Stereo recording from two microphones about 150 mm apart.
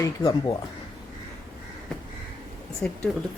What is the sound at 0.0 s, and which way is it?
Speech, 25° left (ahead or behind).